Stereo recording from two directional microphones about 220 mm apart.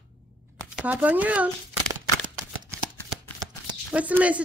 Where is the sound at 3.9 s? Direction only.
5° right (ahead or behind).